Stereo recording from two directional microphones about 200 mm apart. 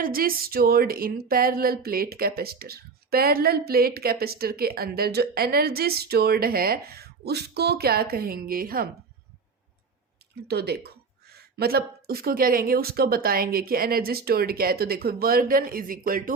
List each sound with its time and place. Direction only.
0.0 s speech: 45° right (ahead or behind)
10.5 s speech: 55° right (ahead or behind)